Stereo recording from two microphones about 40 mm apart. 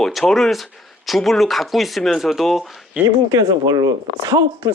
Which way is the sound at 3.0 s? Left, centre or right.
Right.